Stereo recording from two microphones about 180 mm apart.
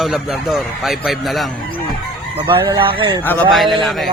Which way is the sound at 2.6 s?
25° right (ahead or behind).